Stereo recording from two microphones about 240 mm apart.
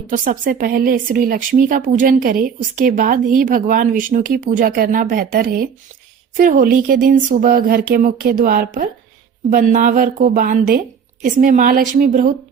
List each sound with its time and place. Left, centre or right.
0.1 s a woman's voice: right